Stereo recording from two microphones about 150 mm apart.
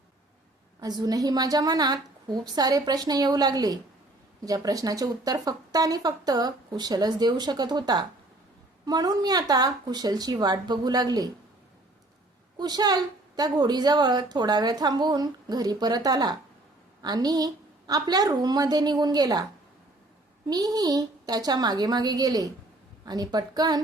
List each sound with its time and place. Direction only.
0.8 s a woman's voice: 25° right (ahead or behind)
12.5 s a woman's voice: 25° right (ahead or behind)
20.5 s a woman's voice: 25° right (ahead or behind)